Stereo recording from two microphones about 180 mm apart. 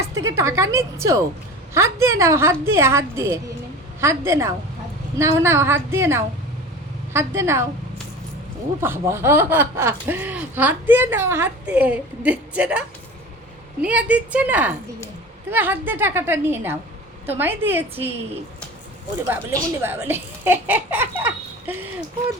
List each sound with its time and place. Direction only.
0.3 s speech: 15° right (ahead or behind)
8.8 s speech: 15° right (ahead or behind)
13.8 s speech: 5° right (ahead or behind)
19.3 s speech: 10° right (ahead or behind)